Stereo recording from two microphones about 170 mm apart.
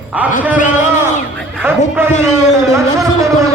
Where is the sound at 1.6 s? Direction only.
10° right (ahead or behind).